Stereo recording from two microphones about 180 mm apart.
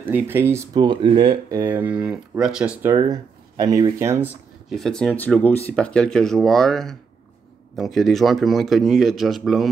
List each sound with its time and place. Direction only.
0.0 s speech: 10° right (ahead or behind)
0.8 s speech: 25° right (ahead or behind)
1.6 s speech: 10° right (ahead or behind)
3.0 s speech: 20° right (ahead or behind)
4.6 s speech: centre (ahead or behind)